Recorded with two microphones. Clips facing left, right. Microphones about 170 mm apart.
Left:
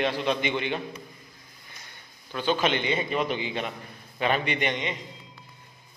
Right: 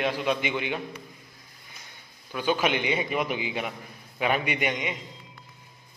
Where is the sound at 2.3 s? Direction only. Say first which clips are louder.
Even; 10° right (ahead or behind).